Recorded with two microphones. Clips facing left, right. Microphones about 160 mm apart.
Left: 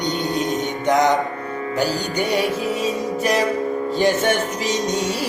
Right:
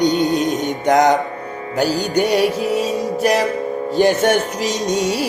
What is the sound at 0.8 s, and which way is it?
Music, 45° right (ahead or behind).